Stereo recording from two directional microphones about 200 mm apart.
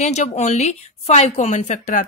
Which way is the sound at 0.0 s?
35° left (ahead or behind).